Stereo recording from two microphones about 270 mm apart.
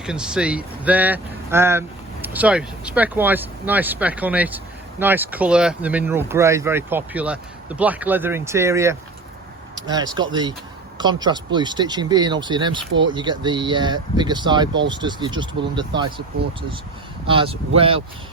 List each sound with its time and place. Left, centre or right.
0.0 s speech: centre
17.2 s speech: centre